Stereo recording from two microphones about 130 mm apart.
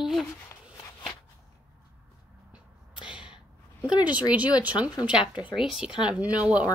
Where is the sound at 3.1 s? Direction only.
10° right (ahead or behind).